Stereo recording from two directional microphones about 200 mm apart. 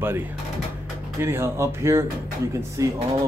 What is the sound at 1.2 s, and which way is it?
Speech, 10° right (ahead or behind).